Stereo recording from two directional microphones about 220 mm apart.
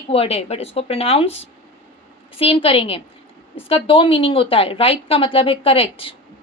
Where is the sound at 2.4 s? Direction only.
25° left (ahead or behind).